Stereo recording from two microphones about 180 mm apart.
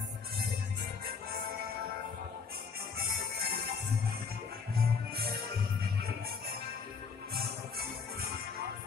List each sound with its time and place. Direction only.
3.0 s music: 55° right (ahead or behind)
4.7 s music: 60° right (ahead or behind)